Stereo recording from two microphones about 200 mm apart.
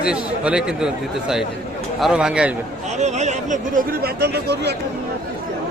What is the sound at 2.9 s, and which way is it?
Speech, 35° right (ahead or behind).